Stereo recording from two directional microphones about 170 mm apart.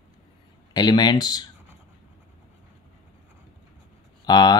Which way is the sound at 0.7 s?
25° left (ahead or behind).